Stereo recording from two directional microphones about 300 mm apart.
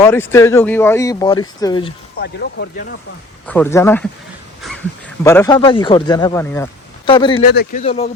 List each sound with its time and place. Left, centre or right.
0.0 s speech: centre
2.1 s speech: left
3.4 s speech: centre
5.2 s speech: centre
7.5 s speech: left